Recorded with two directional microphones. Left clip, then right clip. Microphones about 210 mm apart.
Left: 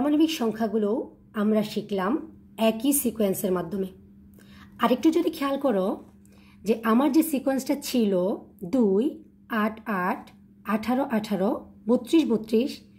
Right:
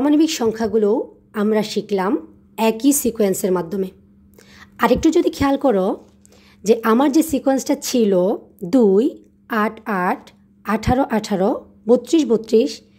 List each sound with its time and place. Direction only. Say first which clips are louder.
0.0 s a woman's voice: right 7 dB; 40° right (ahead or behind)